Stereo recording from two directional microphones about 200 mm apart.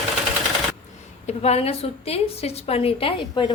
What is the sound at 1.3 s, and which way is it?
A woman's voice, 30° left (ahead or behind).